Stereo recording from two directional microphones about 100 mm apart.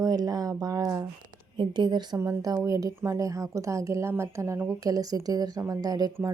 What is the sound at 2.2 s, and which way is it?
Speech, 30° right (ahead or behind).